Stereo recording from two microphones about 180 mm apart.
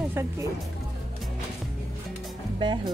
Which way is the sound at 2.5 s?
25° right (ahead or behind).